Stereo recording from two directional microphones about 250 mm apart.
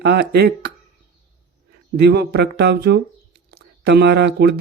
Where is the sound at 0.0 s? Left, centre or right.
Right.